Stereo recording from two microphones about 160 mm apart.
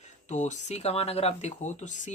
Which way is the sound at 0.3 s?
45° left (ahead or behind).